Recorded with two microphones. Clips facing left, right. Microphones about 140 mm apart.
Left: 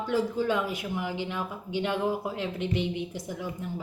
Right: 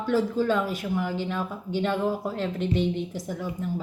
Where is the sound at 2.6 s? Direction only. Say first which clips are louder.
Right 5 dB; 50° right (ahead or behind).